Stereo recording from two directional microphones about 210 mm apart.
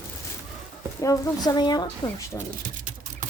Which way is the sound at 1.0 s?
15° left (ahead or behind).